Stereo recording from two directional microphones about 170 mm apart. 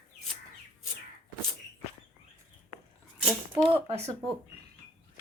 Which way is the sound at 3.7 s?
35° right (ahead or behind).